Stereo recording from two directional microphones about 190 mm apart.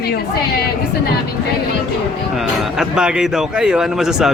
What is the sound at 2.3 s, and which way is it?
Speech, centre (ahead or behind).